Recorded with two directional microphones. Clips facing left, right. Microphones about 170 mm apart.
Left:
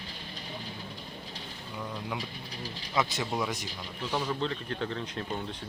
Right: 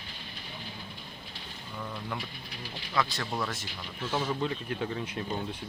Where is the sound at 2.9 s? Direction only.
20° left (ahead or behind).